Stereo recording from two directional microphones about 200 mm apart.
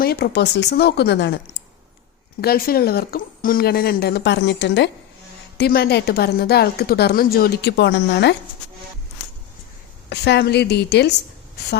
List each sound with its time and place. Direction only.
0.0 s speech: 50° left (ahead or behind)
2.4 s speech: 50° left (ahead or behind)
10.1 s speech: 55° left (ahead or behind)